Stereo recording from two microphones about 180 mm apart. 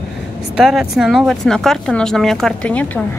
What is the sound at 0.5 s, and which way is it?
Speech, 5° right (ahead or behind).